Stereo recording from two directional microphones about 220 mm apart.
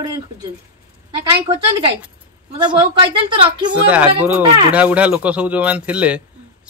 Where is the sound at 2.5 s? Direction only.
20° right (ahead or behind).